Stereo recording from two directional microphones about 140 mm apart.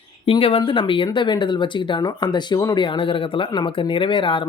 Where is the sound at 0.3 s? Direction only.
40° left (ahead or behind).